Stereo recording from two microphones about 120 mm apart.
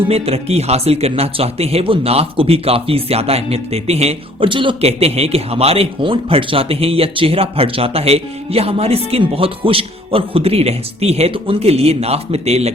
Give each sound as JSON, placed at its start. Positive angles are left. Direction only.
{"t": 0.1, "sound": "speech", "side_deg": -60}